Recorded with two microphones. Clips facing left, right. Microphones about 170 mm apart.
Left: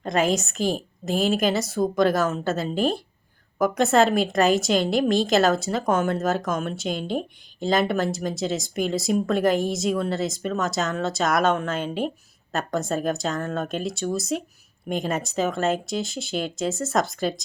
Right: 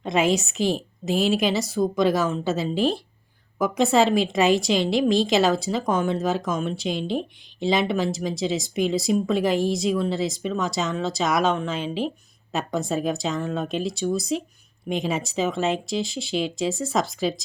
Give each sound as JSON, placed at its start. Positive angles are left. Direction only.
{"t": 0.0, "sound": "a woman's voice", "side_deg": 0}